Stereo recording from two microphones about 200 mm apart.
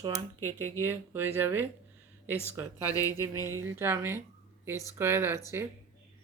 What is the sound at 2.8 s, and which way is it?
Speech, 15° left (ahead or behind).